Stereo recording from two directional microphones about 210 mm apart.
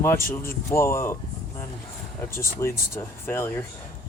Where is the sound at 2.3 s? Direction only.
10° left (ahead or behind).